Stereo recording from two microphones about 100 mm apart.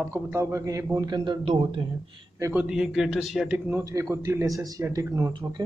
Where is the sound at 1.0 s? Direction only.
45° right (ahead or behind).